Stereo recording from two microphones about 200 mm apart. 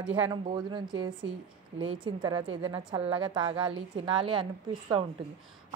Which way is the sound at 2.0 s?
20° right (ahead or behind).